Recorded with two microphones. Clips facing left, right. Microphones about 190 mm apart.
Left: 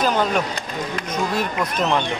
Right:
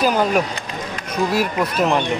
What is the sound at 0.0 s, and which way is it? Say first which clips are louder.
Speech: right 3 dB; 10° right (ahead or behind).